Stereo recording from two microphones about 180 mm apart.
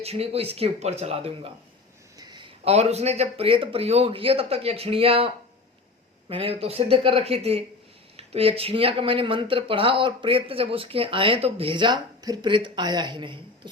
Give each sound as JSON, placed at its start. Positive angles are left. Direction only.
{"t": 0.0, "sound": "speech", "side_deg": -35}